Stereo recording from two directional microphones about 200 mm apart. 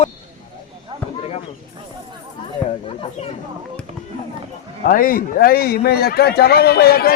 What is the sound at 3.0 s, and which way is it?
Speech, 30° left (ahead or behind).